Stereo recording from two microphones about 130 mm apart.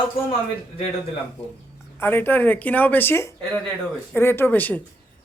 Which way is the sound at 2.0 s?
15° left (ahead or behind).